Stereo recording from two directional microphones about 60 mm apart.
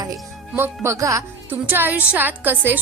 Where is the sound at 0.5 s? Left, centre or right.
Right.